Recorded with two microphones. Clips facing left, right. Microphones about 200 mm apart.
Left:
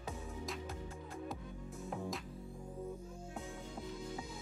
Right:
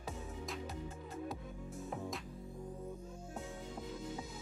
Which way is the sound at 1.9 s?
Centre (ahead or behind).